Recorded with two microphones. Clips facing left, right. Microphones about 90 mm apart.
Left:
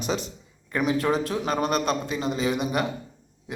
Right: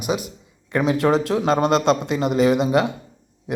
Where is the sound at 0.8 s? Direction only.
25° right (ahead or behind).